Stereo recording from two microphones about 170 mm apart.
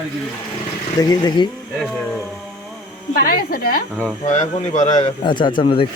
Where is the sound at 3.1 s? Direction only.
55° left (ahead or behind).